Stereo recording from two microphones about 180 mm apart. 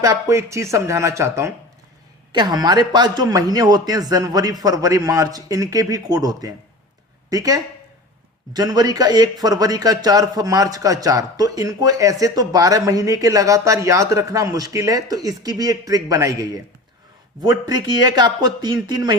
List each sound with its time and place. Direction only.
0.0 s speech: 20° right (ahead or behind)